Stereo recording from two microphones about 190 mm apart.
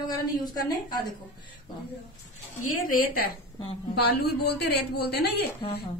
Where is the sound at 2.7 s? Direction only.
45° left (ahead or behind).